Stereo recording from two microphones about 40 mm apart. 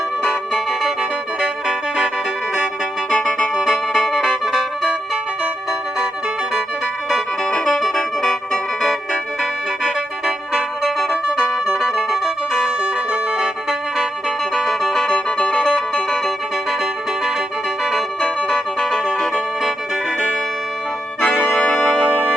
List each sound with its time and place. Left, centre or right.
0.2 s music: centre
3.1 s keyboard: centre
3.7 s music: centre
7.5 s music: centre
9.4 s music: centre
14.3 s music: centre
18.2 s music: centre
21.4 s organ: left
22.0 s music: right